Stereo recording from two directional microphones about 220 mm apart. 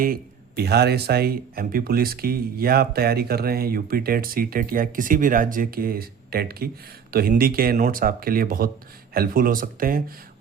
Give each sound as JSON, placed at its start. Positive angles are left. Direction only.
{"t": 0.0, "sound": "speech", "side_deg": -40}